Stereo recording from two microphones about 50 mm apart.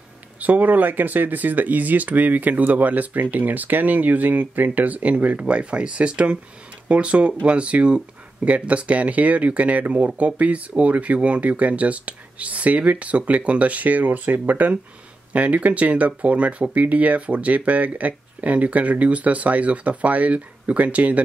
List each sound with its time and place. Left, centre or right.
0.4 s speech: right